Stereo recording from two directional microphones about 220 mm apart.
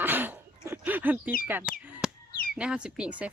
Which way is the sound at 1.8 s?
10° right (ahead or behind).